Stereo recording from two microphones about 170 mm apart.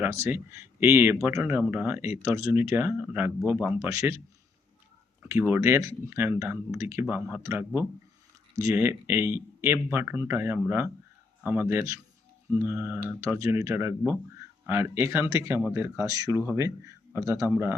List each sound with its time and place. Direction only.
0.0 s speech: 15° right (ahead or behind)
5.3 s speech: 15° right (ahead or behind)